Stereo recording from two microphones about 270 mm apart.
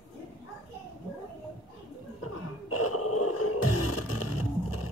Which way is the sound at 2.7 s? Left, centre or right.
Left.